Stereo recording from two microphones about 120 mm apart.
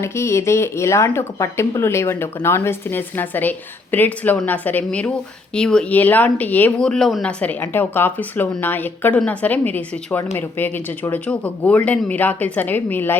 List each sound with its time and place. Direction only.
0.0 s a woman's voice: 20° left (ahead or behind)